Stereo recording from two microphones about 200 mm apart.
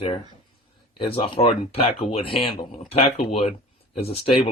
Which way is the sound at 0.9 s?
25° left (ahead or behind).